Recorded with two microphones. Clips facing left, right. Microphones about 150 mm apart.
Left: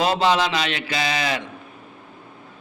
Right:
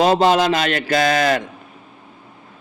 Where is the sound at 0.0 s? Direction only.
45° right (ahead or behind).